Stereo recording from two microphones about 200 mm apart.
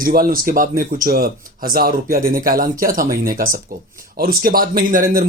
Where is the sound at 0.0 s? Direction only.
45° right (ahead or behind).